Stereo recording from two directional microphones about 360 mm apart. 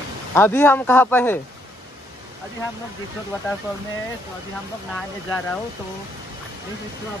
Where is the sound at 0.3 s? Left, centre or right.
Centre.